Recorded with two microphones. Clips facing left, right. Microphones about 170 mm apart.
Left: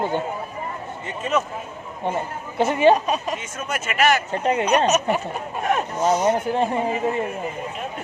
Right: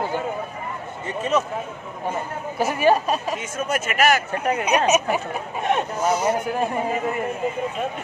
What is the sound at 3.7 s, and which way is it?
Speech, 40° right (ahead or behind).